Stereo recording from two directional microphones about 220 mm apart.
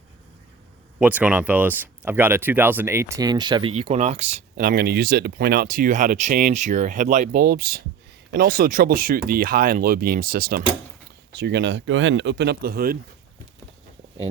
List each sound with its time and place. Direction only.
0.9 s speech: 5° right (ahead or behind); by 4.3 s 30° right (ahead or behind)
4.5 s speech: 40° right (ahead or behind)